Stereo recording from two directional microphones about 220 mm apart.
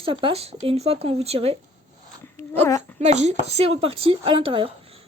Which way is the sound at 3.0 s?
30° right (ahead or behind).